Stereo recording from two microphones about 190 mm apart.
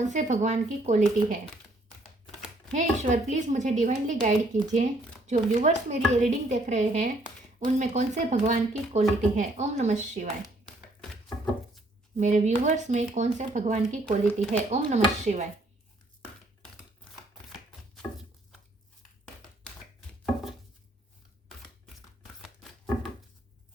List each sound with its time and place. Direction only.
0.0 s a woman's voice: 40° right (ahead or behind)
2.7 s a woman's voice: 40° right (ahead or behind)
12.2 s a woman's voice: 40° right (ahead or behind)
22.2 s a sound: centre (ahead or behind)